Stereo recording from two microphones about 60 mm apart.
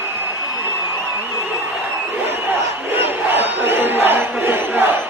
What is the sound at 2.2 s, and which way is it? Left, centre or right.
Crowd, right.